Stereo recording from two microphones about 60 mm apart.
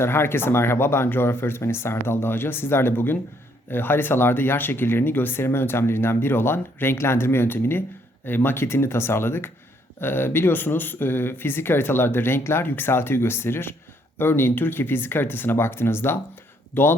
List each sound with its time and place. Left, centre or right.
0.0 s speech: left